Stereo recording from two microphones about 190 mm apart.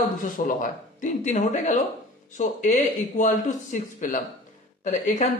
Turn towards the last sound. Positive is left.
turn(degrees=40)  # may be behind; listen again after turning